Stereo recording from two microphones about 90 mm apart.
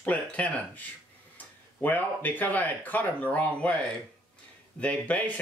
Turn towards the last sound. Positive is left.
turn(degrees=15)  # may be behind; listen again after turning